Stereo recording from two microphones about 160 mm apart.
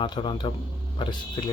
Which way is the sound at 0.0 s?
30° left (ahead or behind).